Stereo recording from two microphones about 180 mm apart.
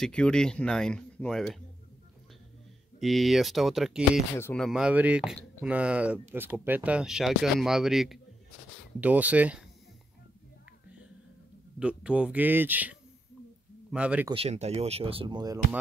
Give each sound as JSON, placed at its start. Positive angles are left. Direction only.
{"t": 0.0, "sound": "speech", "side_deg": 5}
{"t": 3.0, "sound": "speech", "side_deg": 0}
{"t": 4.4, "sound": "speech", "side_deg": 10}
{"t": 4.6, "sound": "speech", "side_deg": -5}
{"t": 11.8, "sound": "speech", "side_deg": -5}
{"t": 13.9, "sound": "speech", "side_deg": -5}
{"t": 14.3, "sound": "speech", "side_deg": -35}